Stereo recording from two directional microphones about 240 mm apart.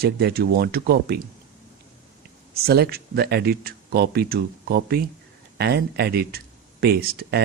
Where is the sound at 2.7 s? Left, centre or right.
Right.